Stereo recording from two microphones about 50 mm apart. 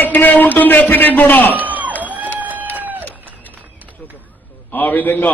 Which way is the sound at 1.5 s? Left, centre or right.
Right.